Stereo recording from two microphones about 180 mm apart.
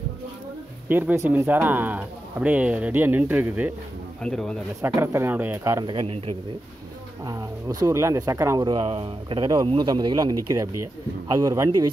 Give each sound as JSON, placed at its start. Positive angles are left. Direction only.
{"t": 0.8, "sound": "speech", "side_deg": -10}
{"t": 4.2, "sound": "speech", "side_deg": 5}
{"t": 4.8, "sound": "speech", "side_deg": -15}
{"t": 5.9, "sound": "a man's voice", "side_deg": -30}
{"t": 7.2, "sound": "speech", "side_deg": -20}